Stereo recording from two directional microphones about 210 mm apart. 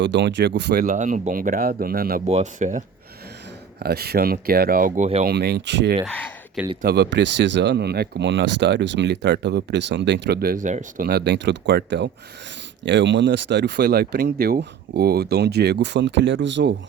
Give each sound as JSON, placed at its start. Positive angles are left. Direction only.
{"t": 0.0, "sound": "speech", "side_deg": -60}
{"t": 2.2, "sound": "speech", "side_deg": -35}
{"t": 3.8, "sound": "speech", "side_deg": -50}
{"t": 5.2, "sound": "speech", "side_deg": -50}
{"t": 6.1, "sound": "speech", "side_deg": 5}
{"t": 6.8, "sound": "speech", "side_deg": -50}